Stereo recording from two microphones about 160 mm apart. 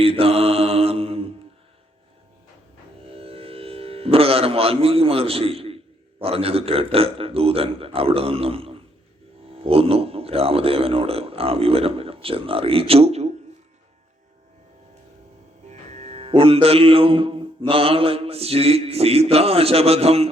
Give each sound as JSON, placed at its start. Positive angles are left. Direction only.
{"t": 0.0, "sound": "mantra", "side_deg": -35}
{"t": 3.1, "sound": "music", "side_deg": -35}
{"t": 6.2, "sound": "speech", "side_deg": -35}
{"t": 15.7, "sound": "music", "side_deg": -40}